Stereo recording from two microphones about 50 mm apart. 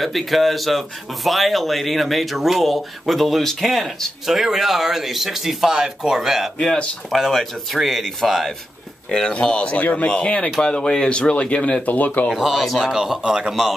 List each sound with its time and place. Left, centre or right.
0.0 s speech: centre
6.6 s speech: centre
7.1 s speech: centre
9.1 s speech: centre; by 12.3 s left
12.4 s speech: centre
12.8 s speech: centre